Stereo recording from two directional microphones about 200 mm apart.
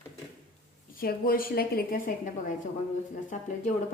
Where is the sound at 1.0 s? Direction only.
45° left (ahead or behind).